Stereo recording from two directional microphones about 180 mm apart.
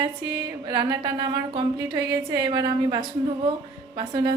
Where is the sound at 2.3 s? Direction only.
25° right (ahead or behind).